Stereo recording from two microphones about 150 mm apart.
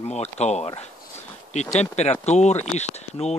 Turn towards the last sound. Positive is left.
turn(degrees=45)  # may be behind; listen again after turning